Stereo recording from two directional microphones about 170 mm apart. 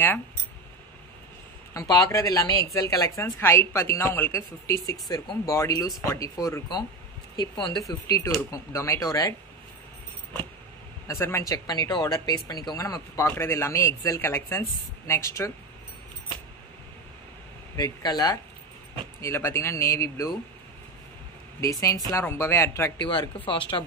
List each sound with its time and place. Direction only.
1.7 s speech: 20° left (ahead or behind)
11.1 s speech: 15° left (ahead or behind)
17.7 s speech: 25° left (ahead or behind)
21.5 s speech: 20° left (ahead or behind)
23.0 s speech: 30° left (ahead or behind)